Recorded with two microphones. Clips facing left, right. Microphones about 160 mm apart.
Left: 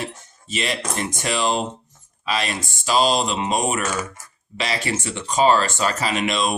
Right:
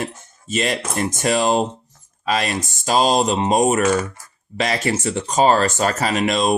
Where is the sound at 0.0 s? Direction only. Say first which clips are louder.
Right 3 dB; 45° right (ahead or behind).